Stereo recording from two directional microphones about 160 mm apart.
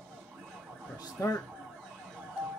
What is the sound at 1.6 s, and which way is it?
Emergency vehicle, centre (ahead or behind).